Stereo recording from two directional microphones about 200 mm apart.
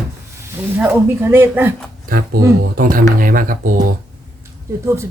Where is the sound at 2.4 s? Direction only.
50° right (ahead or behind).